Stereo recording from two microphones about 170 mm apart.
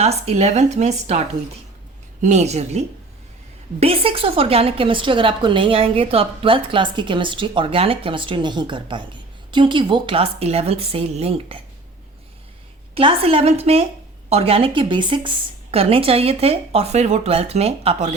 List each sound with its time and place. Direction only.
0.0 s a woman's voice: 40° right (ahead or behind)
2.2 s a woman's voice: 40° right (ahead or behind)
12.9 s a woman's voice: 30° right (ahead or behind)